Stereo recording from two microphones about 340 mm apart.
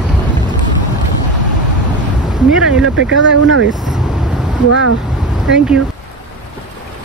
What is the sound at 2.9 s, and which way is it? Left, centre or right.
Speech, right.